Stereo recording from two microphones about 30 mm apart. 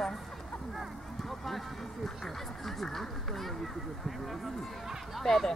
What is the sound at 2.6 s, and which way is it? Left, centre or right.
Speech, centre.